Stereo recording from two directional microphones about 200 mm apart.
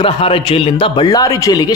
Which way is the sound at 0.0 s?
25° left (ahead or behind).